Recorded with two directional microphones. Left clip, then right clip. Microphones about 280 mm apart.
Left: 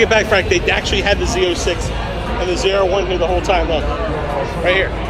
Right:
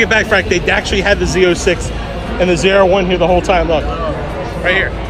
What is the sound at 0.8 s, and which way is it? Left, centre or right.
Speech, centre.